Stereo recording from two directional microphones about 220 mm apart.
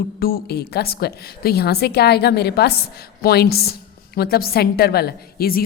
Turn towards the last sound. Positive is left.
turn(degrees=45)  # may be behind; listen again after turning